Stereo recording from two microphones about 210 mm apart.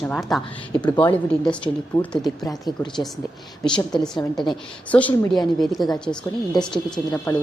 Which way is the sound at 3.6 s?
5° left (ahead or behind).